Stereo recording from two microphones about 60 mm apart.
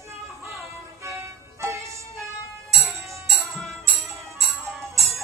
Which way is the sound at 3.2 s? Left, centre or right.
Centre.